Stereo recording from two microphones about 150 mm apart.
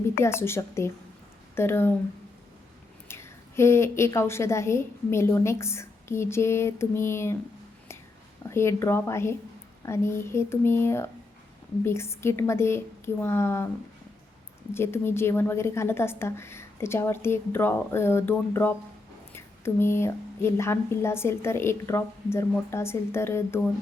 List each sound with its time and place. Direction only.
0.2 s a woman's voice: 15° left (ahead or behind)
3.1 s a woman's voice: 15° left (ahead or behind)
8.4 s a woman's voice: 15° left (ahead or behind)
14.7 s a woman's voice: 15° left (ahead or behind)